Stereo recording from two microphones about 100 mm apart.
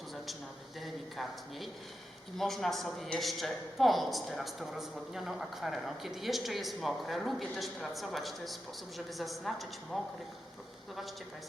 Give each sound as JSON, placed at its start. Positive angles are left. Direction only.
{"t": 0.8, "sound": "speech", "side_deg": 0}